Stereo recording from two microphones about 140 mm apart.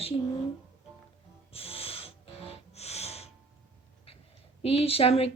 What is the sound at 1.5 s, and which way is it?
Music, 45° left (ahead or behind).